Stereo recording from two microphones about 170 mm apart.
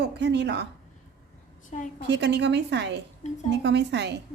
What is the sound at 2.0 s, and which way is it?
A woman's voice, 90° right.